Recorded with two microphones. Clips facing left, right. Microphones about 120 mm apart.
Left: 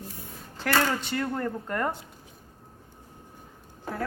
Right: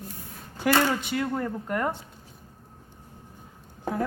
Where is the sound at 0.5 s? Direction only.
15° right (ahead or behind).